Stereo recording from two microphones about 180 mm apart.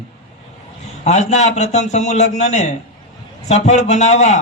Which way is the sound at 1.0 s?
40° left (ahead or behind).